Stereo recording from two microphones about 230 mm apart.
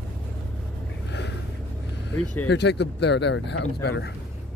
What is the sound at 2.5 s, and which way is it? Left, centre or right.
Speech, left.